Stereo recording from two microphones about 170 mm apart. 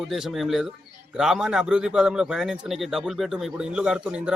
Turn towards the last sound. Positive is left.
turn(degrees=-5)  # may be behind; listen again after turning